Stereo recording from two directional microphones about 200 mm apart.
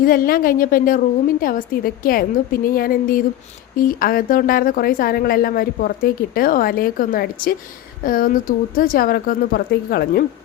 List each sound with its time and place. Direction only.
0.0 s a woman's voice: 45° left (ahead or behind)